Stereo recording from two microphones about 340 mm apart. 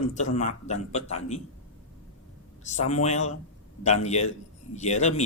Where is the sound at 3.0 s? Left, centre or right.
Centre.